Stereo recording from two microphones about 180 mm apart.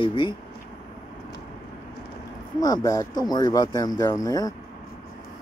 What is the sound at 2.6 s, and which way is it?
Speech, 20° left (ahead or behind).